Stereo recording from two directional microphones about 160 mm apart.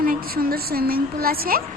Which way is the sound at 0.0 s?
65° right (ahead or behind).